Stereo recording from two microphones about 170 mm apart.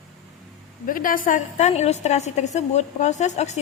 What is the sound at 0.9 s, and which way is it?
A woman's voice, 55° left (ahead or behind).